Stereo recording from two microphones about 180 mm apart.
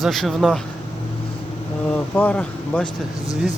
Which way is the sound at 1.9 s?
10° left (ahead or behind).